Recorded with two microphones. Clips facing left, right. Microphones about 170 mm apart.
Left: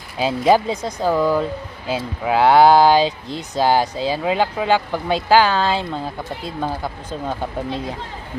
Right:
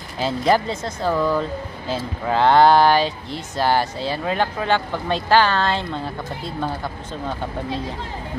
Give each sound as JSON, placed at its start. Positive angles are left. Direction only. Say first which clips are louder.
{"t": 0.2, "sound": "speech", "louder": "left 3 dB", "side_deg": 10}